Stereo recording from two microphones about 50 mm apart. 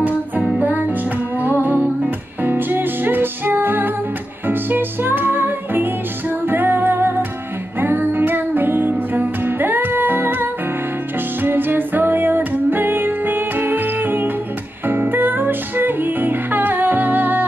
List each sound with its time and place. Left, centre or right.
0.6 s music: right